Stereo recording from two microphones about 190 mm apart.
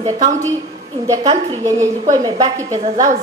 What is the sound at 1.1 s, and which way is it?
A woman's voice, 20° right (ahead or behind).